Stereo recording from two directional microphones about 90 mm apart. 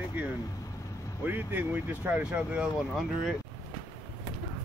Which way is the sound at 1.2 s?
20° right (ahead or behind).